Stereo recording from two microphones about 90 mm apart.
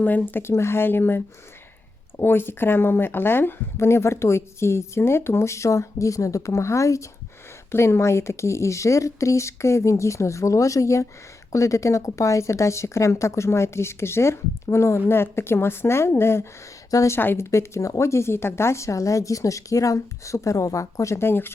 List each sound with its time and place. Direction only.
0.0 s a woman's voice: 20° left (ahead or behind); by 17.2 s 35° left (ahead or behind)
17.2 s a woman's voice: 25° left (ahead or behind)